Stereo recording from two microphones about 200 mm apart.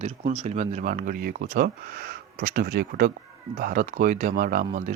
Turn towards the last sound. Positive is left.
turn(degrees=-40)  # may be behind; listen again after turning